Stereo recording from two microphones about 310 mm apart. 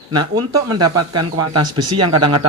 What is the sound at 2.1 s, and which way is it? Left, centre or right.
Speech, centre.